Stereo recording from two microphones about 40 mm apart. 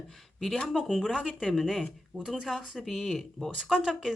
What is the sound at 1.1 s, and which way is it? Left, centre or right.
Speech, centre.